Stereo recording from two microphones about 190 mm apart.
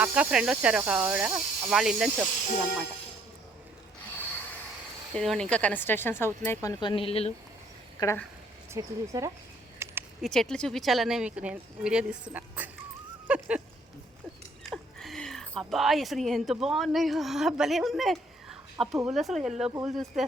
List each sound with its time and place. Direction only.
0.0 s speech: 5° right (ahead or behind)
5.1 s speech: centre (ahead or behind); by 7.3 s 30° left (ahead or behind)
7.9 s speech: 15° left (ahead or behind)
8.7 s speech: 15° right (ahead or behind)
9.7 s a sound: 15° right (ahead or behind)
10.2 s speech: centre (ahead or behind)
14.7 s speech: centre (ahead or behind)